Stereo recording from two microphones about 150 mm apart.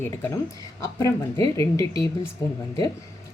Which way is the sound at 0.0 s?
15° left (ahead or behind).